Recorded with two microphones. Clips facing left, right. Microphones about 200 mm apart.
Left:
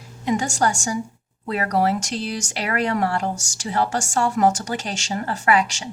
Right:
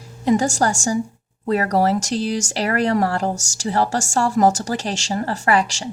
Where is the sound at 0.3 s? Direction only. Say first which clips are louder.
Right 4 dB; 35° right (ahead or behind).